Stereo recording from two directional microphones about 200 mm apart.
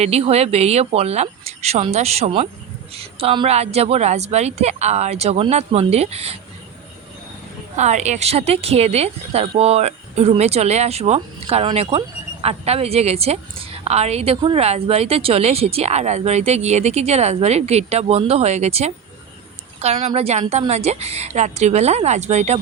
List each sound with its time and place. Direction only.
0.0 s speech: 30° right (ahead or behind)
7.8 s speech: 35° right (ahead or behind)